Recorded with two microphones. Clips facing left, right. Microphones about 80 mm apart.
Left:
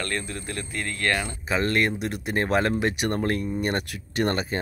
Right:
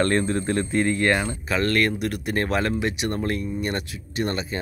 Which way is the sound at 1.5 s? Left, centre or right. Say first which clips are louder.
Right 1 dB; left.